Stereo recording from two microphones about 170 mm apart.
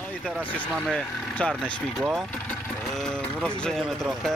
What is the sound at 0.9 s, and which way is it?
Speech, 5° left (ahead or behind).